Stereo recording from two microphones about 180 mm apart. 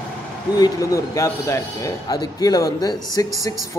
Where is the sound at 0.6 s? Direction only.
20° left (ahead or behind).